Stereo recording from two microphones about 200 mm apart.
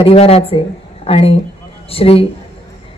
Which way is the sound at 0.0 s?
30° left (ahead or behind).